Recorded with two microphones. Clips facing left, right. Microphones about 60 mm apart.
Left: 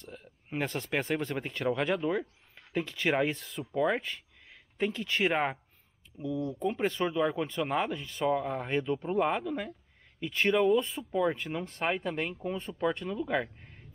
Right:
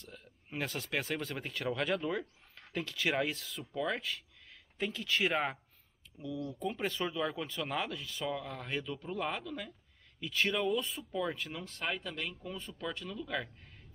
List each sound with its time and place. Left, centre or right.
0.0 s speech: centre
3.3 s speech: centre
3.7 s speech: left
4.1 s a sound: centre
5.0 s speech: centre
12.0 s speech: left
13.1 s speech: left